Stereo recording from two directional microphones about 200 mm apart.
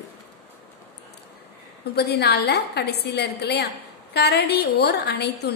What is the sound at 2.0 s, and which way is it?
A woman's voice, 55° left (ahead or behind).